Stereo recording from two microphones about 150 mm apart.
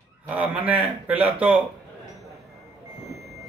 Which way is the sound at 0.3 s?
10° right (ahead or behind).